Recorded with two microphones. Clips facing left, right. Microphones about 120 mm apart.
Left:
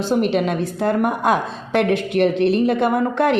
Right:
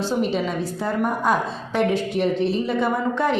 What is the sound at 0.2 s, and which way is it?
A woman's voice, 70° left (ahead or behind).